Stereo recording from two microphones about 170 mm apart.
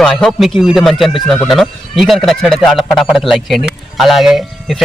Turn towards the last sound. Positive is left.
turn(degrees=0)  # may be behind; listen again after turning